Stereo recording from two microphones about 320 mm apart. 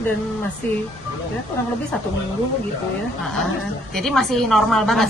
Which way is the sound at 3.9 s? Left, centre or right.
Centre.